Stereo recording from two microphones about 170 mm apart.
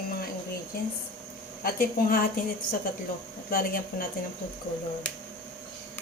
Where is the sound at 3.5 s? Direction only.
60° left (ahead or behind).